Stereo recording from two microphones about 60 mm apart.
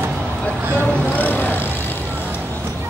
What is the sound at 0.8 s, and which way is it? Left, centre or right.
Vehicle, left.